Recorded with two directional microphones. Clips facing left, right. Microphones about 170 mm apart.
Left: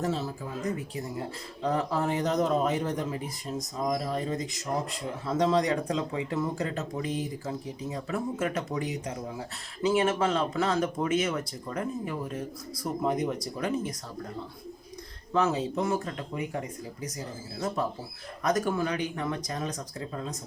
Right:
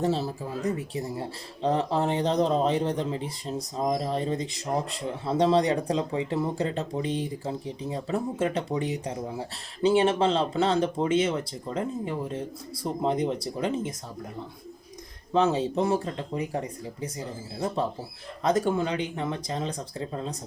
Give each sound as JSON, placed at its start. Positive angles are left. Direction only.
{"t": 0.0, "sound": "speech", "side_deg": -30}
{"t": 15.3, "sound": "speech", "side_deg": -30}
{"t": 18.4, "sound": "speech", "side_deg": -25}